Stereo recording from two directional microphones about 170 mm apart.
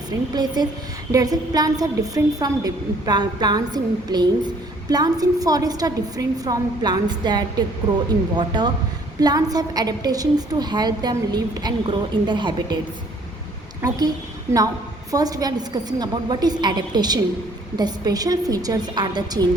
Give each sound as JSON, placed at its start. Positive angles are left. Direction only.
{"t": 0.3, "sound": "a woman's voice", "side_deg": -25}
{"t": 15.1, "sound": "a woman's voice", "side_deg": -20}